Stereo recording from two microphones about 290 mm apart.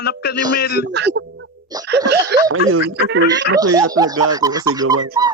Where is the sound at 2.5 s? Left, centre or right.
Right.